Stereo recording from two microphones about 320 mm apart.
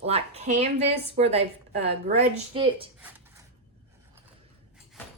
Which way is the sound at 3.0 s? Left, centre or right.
Centre.